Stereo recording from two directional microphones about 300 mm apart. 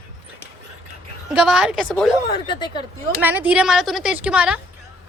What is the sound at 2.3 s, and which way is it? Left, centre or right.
Speech, centre.